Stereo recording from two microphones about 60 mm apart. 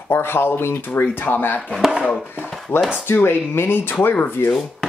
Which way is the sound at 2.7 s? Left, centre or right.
Left.